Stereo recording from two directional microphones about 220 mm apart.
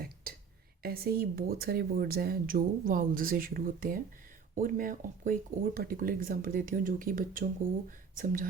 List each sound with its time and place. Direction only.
0.8 s speech: 45° right (ahead or behind)